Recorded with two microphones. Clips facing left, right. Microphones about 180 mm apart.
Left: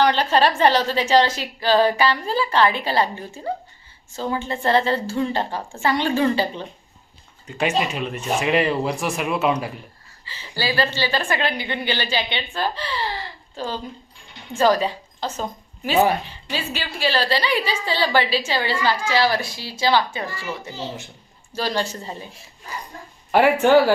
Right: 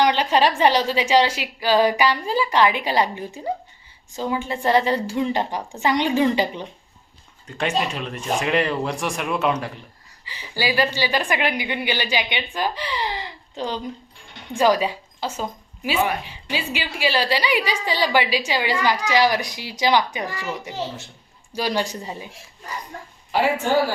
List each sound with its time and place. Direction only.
0.0 s a woman's voice: 15° right (ahead or behind)
7.4 s speech: 5° left (ahead or behind)
10.2 s a woman's voice: 15° right (ahead or behind)
23.3 s a woman's voice: 65° left (ahead or behind)